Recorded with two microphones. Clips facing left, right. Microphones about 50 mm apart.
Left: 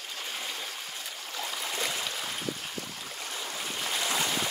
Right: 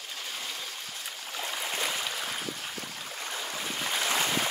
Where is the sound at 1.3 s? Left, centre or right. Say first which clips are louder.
Right 1 dB; centre.